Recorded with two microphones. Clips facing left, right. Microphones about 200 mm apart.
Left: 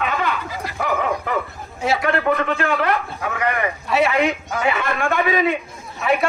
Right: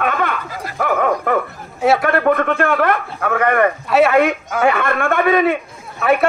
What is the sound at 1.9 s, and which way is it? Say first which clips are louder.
A man's voice: right 4 dB; 55° right (ahead or behind).